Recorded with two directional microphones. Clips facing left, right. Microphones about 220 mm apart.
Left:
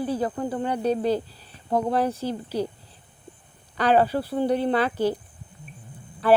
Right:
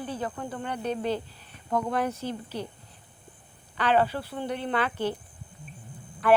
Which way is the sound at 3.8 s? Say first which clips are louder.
Left 4 dB; 40° left (ahead or behind).